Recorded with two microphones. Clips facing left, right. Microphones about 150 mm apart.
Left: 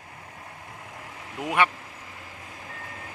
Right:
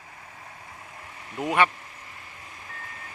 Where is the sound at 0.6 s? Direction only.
75° left (ahead or behind).